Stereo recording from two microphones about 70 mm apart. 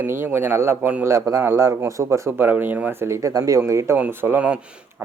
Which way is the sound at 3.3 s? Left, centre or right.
Right.